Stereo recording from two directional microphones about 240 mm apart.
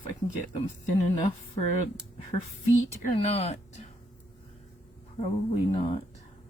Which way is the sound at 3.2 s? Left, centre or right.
Left.